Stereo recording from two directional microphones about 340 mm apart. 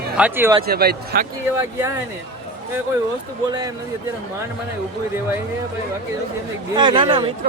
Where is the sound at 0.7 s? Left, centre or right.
Right.